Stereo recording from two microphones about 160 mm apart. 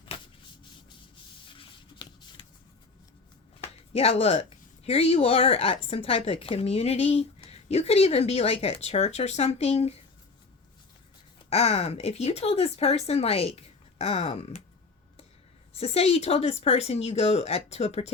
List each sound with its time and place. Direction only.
1.5 s a sound: 30° left (ahead or behind)
3.9 s speech: 40° left (ahead or behind)
11.4 s speech: 40° left (ahead or behind)
15.7 s speech: 40° left (ahead or behind)